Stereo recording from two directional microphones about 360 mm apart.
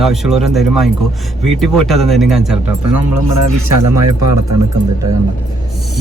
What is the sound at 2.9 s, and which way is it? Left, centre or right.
Speech, right.